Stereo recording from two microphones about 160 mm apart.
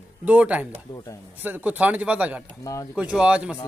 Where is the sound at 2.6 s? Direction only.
20° left (ahead or behind).